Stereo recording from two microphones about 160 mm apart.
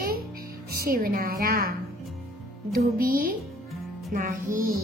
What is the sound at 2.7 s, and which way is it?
Speech, 65° right (ahead or behind).